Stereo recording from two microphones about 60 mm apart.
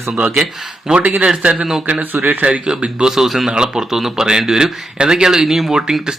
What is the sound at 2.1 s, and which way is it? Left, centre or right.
Speech, right.